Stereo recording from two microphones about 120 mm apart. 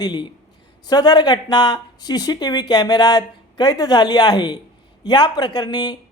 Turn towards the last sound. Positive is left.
turn(degrees=35)  # may be behind; listen again after turning